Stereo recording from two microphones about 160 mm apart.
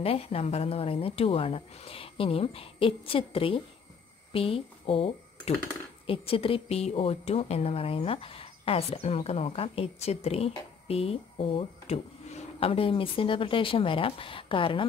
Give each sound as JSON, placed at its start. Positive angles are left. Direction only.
{"t": 0.0, "sound": "a woman's voice", "side_deg": 35}